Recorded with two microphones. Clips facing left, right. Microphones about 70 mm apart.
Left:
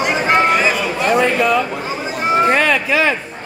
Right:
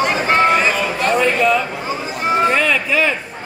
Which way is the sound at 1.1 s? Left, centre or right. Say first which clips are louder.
Left 1 dB; left.